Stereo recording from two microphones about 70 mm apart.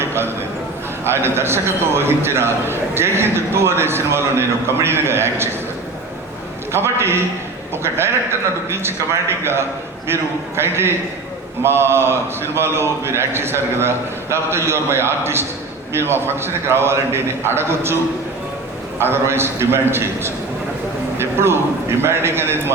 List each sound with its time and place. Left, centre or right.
0.0 s a sound: right
1.0 s a man's voice: right
6.7 s a man's voice: right
18.9 s a man's voice: right